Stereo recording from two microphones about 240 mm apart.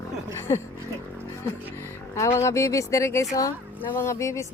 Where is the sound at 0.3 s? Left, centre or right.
Centre.